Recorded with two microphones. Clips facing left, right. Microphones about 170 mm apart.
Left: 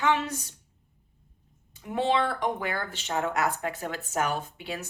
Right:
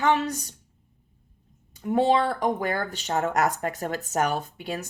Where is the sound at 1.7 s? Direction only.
40° right (ahead or behind).